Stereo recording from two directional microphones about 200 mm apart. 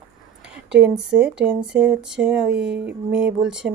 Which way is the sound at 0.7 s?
5° right (ahead or behind).